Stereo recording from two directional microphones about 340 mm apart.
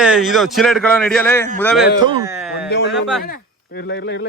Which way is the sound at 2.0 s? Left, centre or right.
Centre.